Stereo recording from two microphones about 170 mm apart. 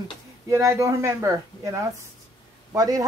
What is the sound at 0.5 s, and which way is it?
Speech, 15° right (ahead or behind).